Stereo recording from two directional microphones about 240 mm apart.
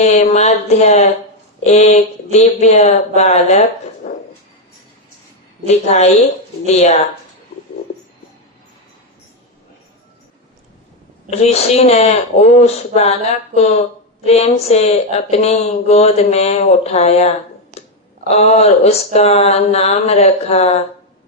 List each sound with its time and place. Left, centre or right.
0.0 s speech: left
4.0 s a sound: left
5.6 s speech: left
11.3 s speech: left
17.7 s a sound: right
18.3 s speech: left